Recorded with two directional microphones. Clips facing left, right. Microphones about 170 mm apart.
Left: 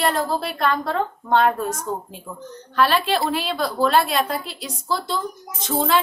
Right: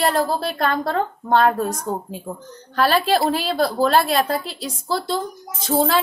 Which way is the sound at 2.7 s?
40° right (ahead or behind).